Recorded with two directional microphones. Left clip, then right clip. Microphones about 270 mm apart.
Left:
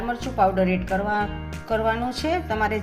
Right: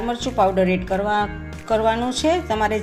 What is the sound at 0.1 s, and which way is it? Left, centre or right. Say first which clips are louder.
A woman's voice: right 2 dB; right.